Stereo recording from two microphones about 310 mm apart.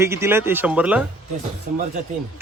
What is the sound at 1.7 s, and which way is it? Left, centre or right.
Speech, right.